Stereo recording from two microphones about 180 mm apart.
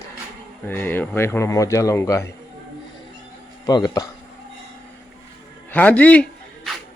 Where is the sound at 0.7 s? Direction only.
10° left (ahead or behind).